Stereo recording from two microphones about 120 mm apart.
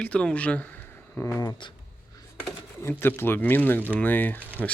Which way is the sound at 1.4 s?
35° left (ahead or behind).